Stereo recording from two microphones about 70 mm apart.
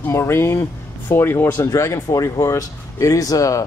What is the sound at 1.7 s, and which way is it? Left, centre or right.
Speech, left.